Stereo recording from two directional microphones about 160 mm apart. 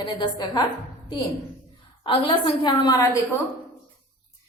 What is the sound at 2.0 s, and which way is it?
Speech, 30° left (ahead or behind).